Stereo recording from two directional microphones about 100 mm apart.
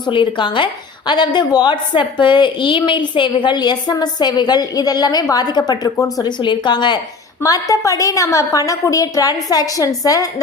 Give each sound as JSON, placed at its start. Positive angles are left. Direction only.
{"t": 0.0, "sound": "a woman's voice", "side_deg": 55}
{"t": 6.4, "sound": "a woman's voice", "side_deg": 50}
{"t": 7.4, "sound": "a woman's voice", "side_deg": 35}